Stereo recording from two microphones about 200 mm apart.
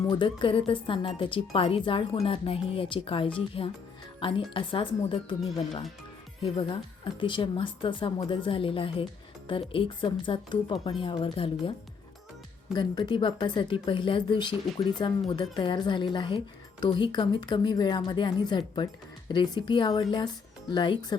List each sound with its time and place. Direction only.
0.1 s speech: 25° left (ahead or behind)
12.7 s speech: 20° left (ahead or behind)